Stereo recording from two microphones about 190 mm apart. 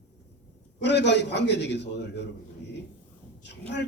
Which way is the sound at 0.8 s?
65° left (ahead or behind).